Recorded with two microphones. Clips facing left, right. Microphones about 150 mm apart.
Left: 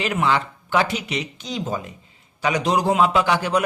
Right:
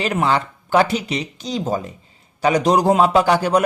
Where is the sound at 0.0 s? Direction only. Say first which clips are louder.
Right 2 dB; 35° right (ahead or behind).